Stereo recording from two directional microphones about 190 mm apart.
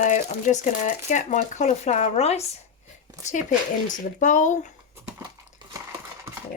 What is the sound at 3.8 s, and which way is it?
Speech, 40° left (ahead or behind).